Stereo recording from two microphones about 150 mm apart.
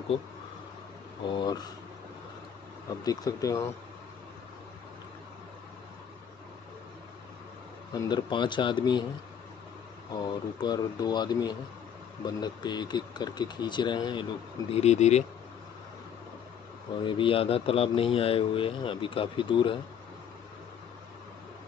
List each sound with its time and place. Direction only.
1.3 s speech: 25° left (ahead or behind)
3.0 s speech: 25° left (ahead or behind)
7.9 s a man's voice: 25° left (ahead or behind)
10.1 s speech: 25° left (ahead or behind)
14.7 s speech: 45° left (ahead or behind)
17.0 s a man's voice: 35° left (ahead or behind)